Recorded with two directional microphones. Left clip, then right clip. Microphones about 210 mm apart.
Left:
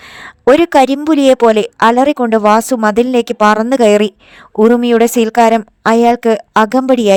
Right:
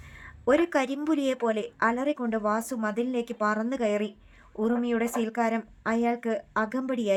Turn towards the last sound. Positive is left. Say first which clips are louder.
# left 19 dB
turn(degrees=45)  # may be behind; listen again after turning